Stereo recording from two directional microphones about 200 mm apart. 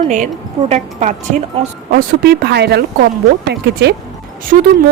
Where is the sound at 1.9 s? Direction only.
55° right (ahead or behind).